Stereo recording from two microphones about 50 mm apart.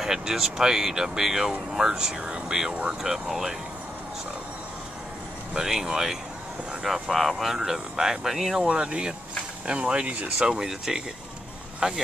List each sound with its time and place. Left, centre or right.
0.0 s speech: centre; by 3.0 s right
3.0 s speech: centre
5.5 s speech: centre
8.6 s speech: centre
10.4 s speech: centre